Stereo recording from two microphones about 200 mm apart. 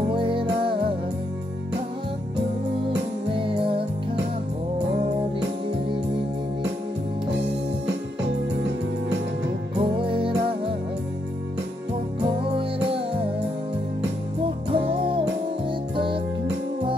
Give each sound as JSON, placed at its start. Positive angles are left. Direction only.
{"t": 0.1, "sound": "music", "side_deg": -25}
{"t": 3.3, "sound": "music", "side_deg": -25}
{"t": 9.8, "sound": "music", "side_deg": -25}
{"t": 14.7, "sound": "music", "side_deg": -25}